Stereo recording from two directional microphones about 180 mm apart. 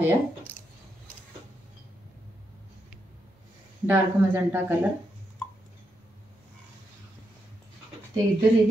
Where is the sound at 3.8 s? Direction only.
10° right (ahead or behind).